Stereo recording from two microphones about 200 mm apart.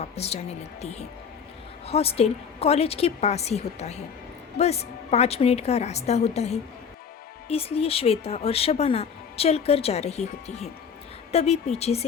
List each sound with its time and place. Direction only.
0.0 s a woman's voice: 30° left (ahead or behind)